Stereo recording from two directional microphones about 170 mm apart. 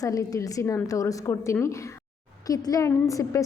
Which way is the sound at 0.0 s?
20° left (ahead or behind).